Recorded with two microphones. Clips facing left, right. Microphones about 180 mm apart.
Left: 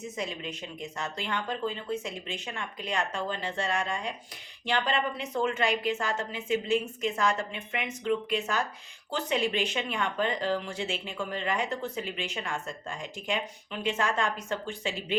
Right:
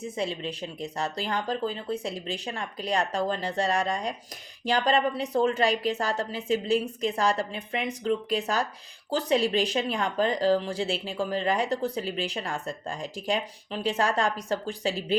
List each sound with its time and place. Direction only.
0.0 s speech: 30° right (ahead or behind)